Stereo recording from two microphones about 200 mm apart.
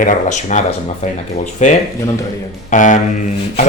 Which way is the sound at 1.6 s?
35° left (ahead or behind).